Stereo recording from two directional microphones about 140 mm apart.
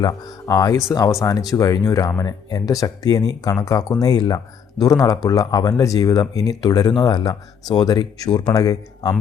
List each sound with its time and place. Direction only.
0.0 s speech: 25° left (ahead or behind)